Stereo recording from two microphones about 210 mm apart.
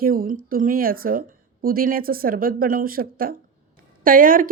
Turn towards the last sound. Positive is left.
turn(degrees=-40)  # may be behind; listen again after turning